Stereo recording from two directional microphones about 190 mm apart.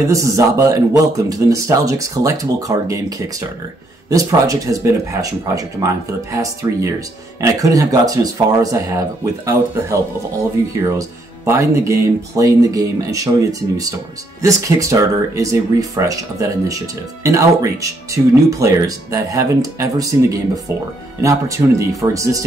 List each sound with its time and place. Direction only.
0.1 s speech: 15° right (ahead or behind)